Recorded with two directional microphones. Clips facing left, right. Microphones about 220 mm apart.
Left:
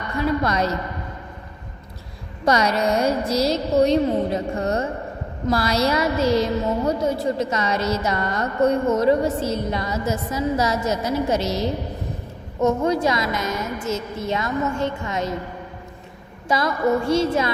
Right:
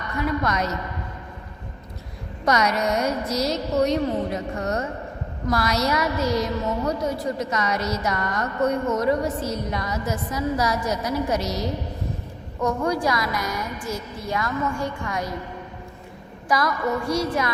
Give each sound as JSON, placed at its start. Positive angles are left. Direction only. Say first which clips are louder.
{"t": 0.1, "sound": "a man's voice", "louder": "left 3 dB", "side_deg": 30}
{"t": 2.4, "sound": "a woman's voice", "louder": "left 2 dB", "side_deg": 30}
{"t": 16.5, "sound": "a woman's voice", "louder": "left 3 dB", "side_deg": 25}